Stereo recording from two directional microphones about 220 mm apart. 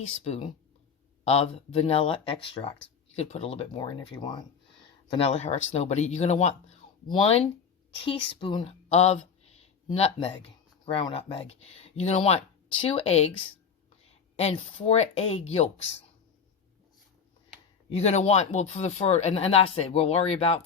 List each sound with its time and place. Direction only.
0.3 s speech: 30° left (ahead or behind)
17.8 s speech: 30° left (ahead or behind)